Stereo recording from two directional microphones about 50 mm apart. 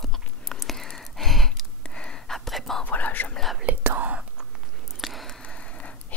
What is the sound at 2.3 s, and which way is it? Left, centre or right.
Whispering, centre.